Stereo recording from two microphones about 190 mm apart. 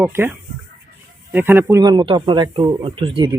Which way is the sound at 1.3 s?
10° right (ahead or behind).